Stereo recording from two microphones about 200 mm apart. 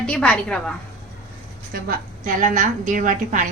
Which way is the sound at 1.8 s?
40° right (ahead or behind).